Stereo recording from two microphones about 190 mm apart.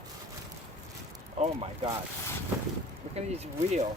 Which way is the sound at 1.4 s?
25° right (ahead or behind).